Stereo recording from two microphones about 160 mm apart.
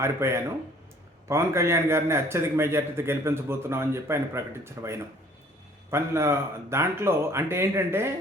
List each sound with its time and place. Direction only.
0.0 s speech: 15° right (ahead or behind)